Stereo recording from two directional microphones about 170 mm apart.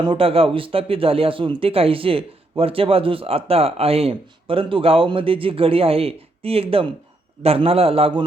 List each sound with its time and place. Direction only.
0.0 s speech: 30° right (ahead or behind)